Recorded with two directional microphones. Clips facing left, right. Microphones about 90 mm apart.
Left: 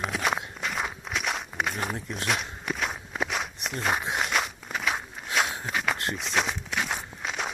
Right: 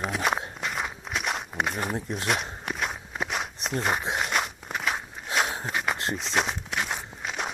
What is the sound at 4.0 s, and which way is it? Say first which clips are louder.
Walk: even; 30° right (ahead or behind).